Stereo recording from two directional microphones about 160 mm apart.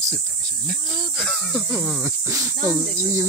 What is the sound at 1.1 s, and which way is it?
Speech, centre (ahead or behind).